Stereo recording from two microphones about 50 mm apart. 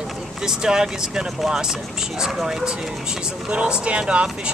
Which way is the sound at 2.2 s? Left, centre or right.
Centre.